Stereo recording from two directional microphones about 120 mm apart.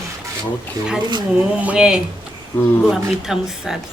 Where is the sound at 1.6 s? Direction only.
10° right (ahead or behind).